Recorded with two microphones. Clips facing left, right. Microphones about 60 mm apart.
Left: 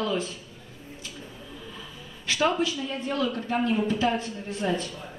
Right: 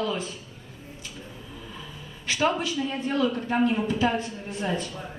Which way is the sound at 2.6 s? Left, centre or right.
Right.